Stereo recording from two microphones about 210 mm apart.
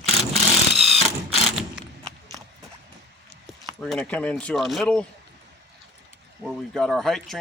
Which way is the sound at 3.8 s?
Centre (ahead or behind).